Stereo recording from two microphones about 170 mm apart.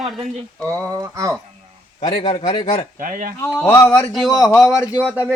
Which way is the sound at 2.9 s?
55° right (ahead or behind).